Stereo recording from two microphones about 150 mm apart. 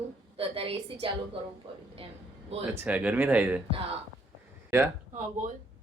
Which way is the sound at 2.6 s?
10° right (ahead or behind).